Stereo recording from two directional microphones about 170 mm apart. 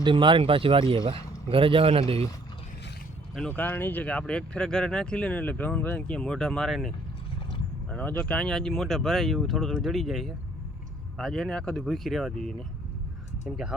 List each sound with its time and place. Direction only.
0.0 s speech: 30° right (ahead or behind)
3.3 s speech: 5° left (ahead or behind)